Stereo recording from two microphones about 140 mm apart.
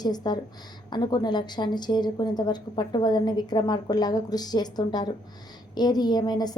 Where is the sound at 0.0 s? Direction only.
30° left (ahead or behind).